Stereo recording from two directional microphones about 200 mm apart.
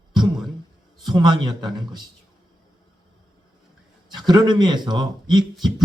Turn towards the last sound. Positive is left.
turn(degrees=-20)  # may be behind; listen again after turning